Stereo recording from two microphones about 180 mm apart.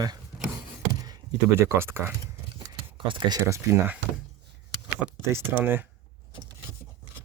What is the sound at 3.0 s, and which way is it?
Speech, 25° right (ahead or behind).